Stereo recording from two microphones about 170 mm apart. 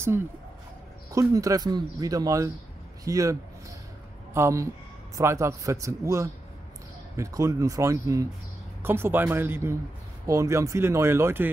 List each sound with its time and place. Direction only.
1.1 s speech: 20° right (ahead or behind)